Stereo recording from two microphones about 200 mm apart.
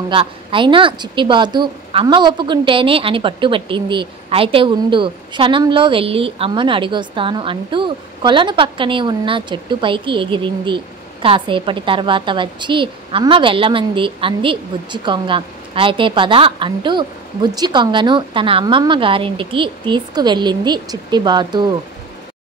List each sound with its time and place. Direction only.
0.1 s speech: 25° right (ahead or behind)